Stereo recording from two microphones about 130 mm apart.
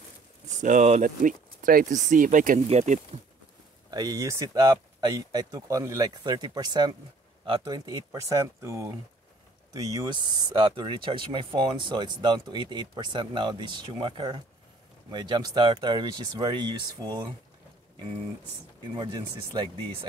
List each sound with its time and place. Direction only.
0.6 s speech: 75° right (ahead or behind); by 2.6 s 90° right
2.7 s speech: 60° right (ahead or behind)
3.9 s speech: 30° right (ahead or behind)
18.9 s speech: 35° right (ahead or behind)